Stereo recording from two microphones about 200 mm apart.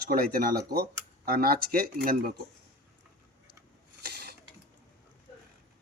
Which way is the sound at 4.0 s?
55° right (ahead or behind).